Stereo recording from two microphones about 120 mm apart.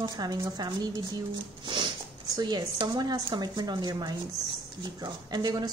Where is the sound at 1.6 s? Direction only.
40° right (ahead or behind).